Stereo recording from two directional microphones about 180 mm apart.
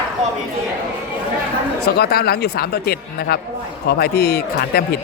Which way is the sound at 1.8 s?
60° left (ahead or behind).